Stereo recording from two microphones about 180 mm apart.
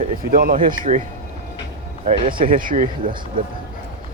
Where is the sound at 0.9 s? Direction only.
40° right (ahead or behind).